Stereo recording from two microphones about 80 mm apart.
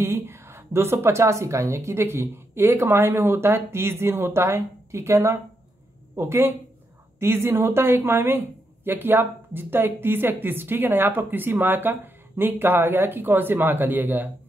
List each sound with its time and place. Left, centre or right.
0.0 s speech: right